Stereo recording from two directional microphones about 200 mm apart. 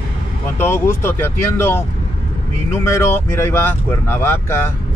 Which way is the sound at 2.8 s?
15° left (ahead or behind).